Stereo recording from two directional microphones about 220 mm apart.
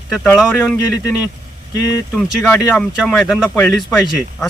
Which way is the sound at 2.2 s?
5° left (ahead or behind).